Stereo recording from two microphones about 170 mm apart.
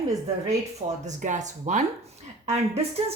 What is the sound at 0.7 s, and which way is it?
A woman's voice, 45° right (ahead or behind).